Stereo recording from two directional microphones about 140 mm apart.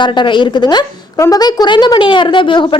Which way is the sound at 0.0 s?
35° left (ahead or behind).